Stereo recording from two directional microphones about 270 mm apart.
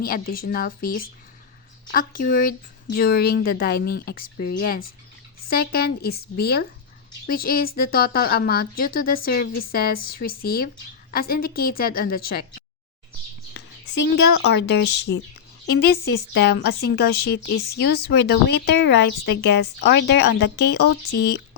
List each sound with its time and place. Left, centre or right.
0.0 s a woman's voice: left